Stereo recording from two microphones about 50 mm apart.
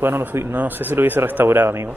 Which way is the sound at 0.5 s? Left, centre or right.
Right.